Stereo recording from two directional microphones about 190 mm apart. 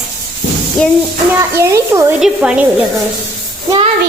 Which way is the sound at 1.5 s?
15° right (ahead or behind).